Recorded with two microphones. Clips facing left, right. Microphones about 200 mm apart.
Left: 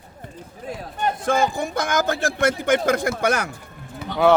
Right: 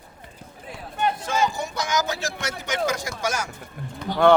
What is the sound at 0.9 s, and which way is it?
Speech, 50° left (ahead or behind).